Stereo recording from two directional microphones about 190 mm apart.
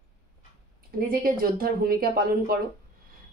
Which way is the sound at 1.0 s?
50° right (ahead or behind).